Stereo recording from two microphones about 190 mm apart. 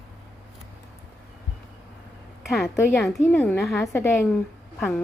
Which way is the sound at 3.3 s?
10° left (ahead or behind).